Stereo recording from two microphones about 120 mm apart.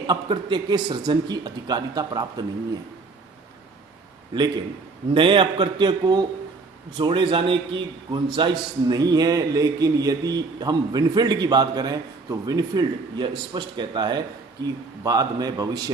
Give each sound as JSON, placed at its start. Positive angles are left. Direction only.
{"t": 0.1, "sound": "a man's voice", "side_deg": -40}
{"t": 5.1, "sound": "a man's voice", "side_deg": -45}